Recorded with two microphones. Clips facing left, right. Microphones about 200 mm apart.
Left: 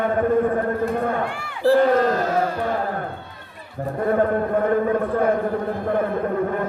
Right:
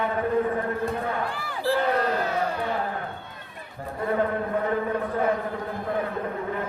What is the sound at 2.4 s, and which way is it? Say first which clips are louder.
Music: left 5 dB; 45° left (ahead or behind).